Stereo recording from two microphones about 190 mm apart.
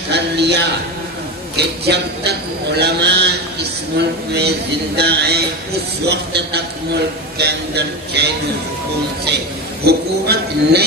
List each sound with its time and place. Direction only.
0.1 s a man's voice: 60° right (ahead or behind)
9.8 s a man's voice: 55° right (ahead or behind)